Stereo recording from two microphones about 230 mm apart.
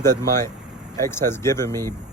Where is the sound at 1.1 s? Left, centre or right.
Centre.